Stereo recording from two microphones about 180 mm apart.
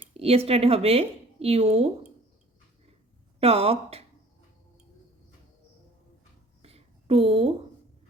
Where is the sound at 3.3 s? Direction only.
35° right (ahead or behind).